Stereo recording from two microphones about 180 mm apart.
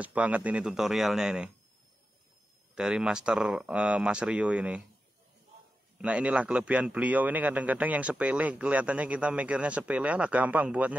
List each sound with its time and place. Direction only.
0.0 s speech: 10° right (ahead or behind)
2.7 s speech: 5° right (ahead or behind)
5.9 s a man's voice: 5° right (ahead or behind)